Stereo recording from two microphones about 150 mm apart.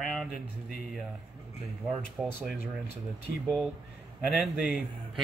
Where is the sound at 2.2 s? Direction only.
5° right (ahead or behind).